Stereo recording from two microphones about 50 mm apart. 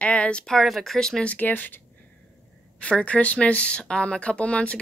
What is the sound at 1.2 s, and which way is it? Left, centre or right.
Speech, left.